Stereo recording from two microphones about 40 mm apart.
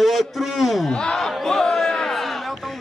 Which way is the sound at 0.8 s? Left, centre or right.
Left.